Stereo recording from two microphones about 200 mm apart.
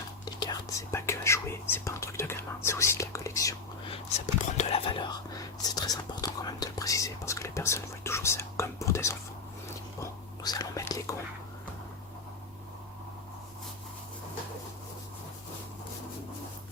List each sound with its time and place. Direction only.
0.3 s whispering: 20° left (ahead or behind)
4.5 s whispering: 30° left (ahead or behind)